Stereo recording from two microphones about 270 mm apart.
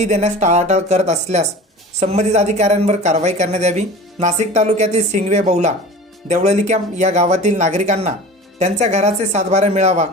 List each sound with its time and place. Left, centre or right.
0.0 s speech: right